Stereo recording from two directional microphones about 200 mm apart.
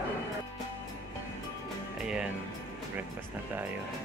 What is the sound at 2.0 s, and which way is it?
Music, 5° right (ahead or behind).